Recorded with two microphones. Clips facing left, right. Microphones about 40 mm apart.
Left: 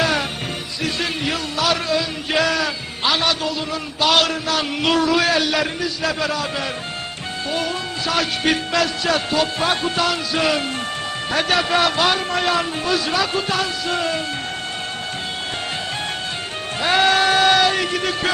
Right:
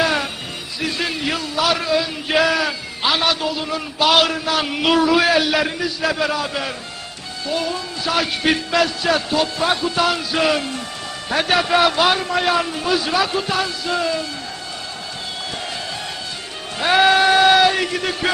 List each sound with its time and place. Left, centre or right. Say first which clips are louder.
0.0 s music: right 1 dB; centre
0.8 s a sound: right 1 dB; centre
7.4 s speech: right 1 dB; left
8.0 s a man's voice: right 1 dB; centre
9.6 s a man's voice: right 2 dB; centre
10.0 s a man's voice: right 1 dB; centre
14.0 s speech: right 1 dB; left
16.8 s a sound: right 2 dB; centre